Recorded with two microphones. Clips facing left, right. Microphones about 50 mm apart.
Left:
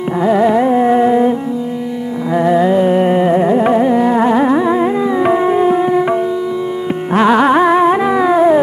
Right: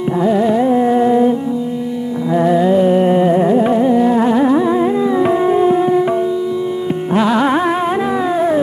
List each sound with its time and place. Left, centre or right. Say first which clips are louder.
0.2 s carnatic music: left 3 dB; left
2.3 s carnatic music: left 1 dB; left
7.2 s music: left 6 dB; left
8.1 s a sound: left 5 dB; left